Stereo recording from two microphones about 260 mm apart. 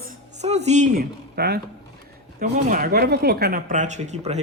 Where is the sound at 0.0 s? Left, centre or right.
Right.